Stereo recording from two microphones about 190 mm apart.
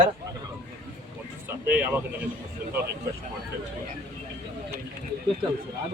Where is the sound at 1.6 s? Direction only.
10° right (ahead or behind).